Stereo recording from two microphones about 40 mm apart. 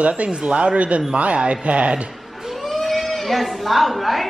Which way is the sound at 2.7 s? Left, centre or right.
Centre.